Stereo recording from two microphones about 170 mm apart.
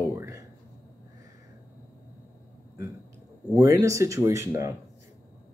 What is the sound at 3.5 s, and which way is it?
Speech, 20° right (ahead or behind).